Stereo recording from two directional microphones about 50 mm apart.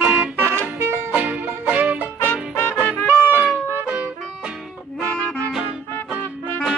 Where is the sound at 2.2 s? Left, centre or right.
Left.